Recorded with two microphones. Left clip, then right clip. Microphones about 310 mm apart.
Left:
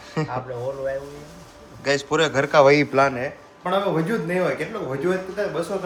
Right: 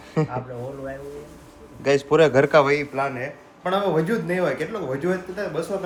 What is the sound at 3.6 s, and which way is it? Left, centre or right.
Speech, centre.